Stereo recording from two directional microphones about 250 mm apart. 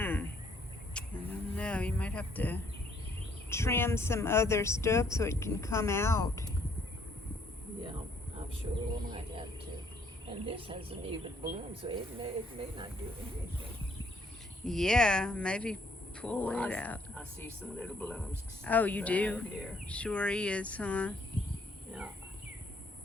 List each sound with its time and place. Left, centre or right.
0.0 s a sound: centre
0.9 s music: centre
1.5 s speech: centre
8.7 s speech: right
10.4 s speech: right
14.6 s speech: centre